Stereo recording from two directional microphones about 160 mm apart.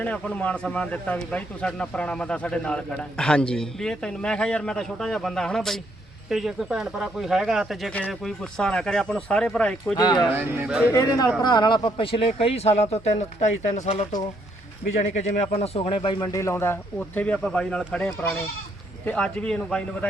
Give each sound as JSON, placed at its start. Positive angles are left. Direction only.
{"t": 0.0, "sound": "speech", "side_deg": 5}
{"t": 10.0, "sound": "speech", "side_deg": 25}
{"t": 10.3, "sound": "speech", "side_deg": -15}
{"t": 10.9, "sound": "a man's voice", "side_deg": 20}
{"t": 16.2, "sound": "a man's voice", "side_deg": 20}